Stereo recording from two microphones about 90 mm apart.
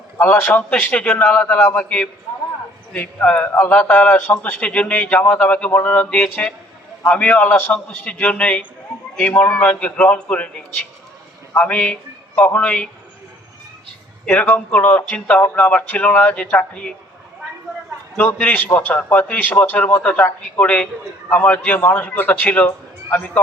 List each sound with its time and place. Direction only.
0.2 s a man's voice: 20° left (ahead or behind)
3.2 s a man's voice: 20° left (ahead or behind)
14.7 s a man's voice: 15° left (ahead or behind)
18.2 s a man's voice: 15° left (ahead or behind)